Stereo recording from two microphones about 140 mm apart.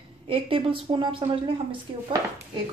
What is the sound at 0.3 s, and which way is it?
A woman's voice, 40° right (ahead or behind).